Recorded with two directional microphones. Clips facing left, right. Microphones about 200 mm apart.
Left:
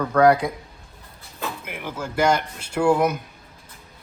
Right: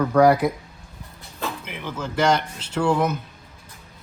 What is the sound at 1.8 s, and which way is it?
Speech, 10° left (ahead or behind).